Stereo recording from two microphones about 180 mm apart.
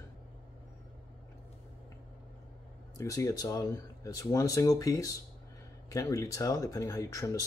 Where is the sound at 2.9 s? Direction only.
15° left (ahead or behind).